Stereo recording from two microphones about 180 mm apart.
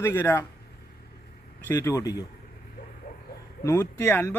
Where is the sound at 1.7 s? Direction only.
15° left (ahead or behind).